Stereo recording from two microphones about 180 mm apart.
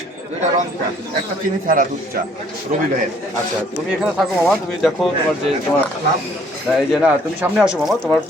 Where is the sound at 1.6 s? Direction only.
50° right (ahead or behind).